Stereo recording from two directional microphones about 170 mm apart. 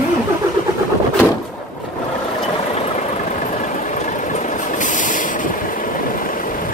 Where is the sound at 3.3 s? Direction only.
50° left (ahead or behind).